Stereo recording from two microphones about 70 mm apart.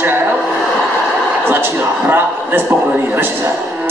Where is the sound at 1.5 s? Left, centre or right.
Right.